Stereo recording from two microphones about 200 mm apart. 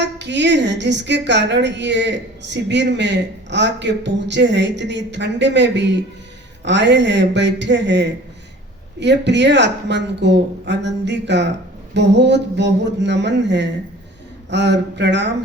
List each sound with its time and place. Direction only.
0.0 s a woman's voice: 60° right (ahead or behind)